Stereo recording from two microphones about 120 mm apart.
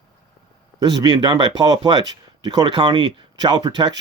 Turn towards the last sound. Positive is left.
turn(degrees=-35)  # may be behind; listen again after turning